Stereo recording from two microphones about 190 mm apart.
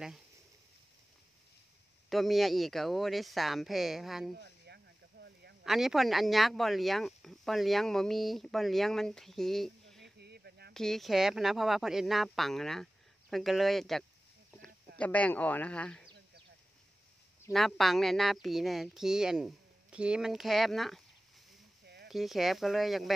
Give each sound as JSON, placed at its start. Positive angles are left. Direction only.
{"t": 2.0, "sound": "speech", "side_deg": 0}
{"t": 4.7, "sound": "a sound", "side_deg": -60}
{"t": 5.6, "sound": "speech", "side_deg": 0}
{"t": 10.0, "sound": "a sound", "side_deg": -60}
{"t": 10.7, "sound": "speech", "side_deg": 0}
{"t": 17.5, "sound": "speech", "side_deg": 0}
{"t": 22.0, "sound": "speech", "side_deg": 0}